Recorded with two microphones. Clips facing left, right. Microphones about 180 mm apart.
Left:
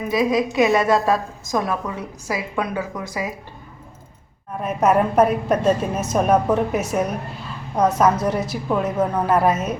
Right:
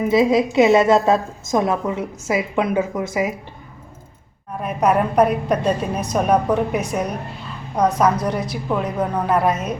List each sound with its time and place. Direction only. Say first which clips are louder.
0.0 s a woman's voice: right 4 dB; 25° right (ahead or behind)
4.6 s a woman's voice: even; centre (ahead or behind)